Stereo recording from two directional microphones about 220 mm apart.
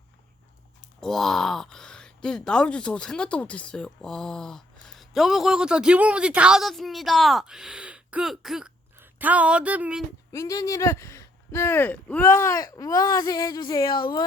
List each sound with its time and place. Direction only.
1.0 s speech: centre (ahead or behind)
10.3 s speech: 15° left (ahead or behind)